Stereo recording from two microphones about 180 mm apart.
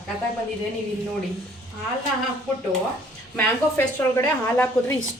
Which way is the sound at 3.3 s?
10° left (ahead or behind).